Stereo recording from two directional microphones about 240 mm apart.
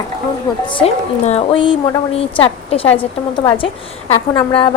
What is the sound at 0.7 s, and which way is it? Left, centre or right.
A woman's voice, left.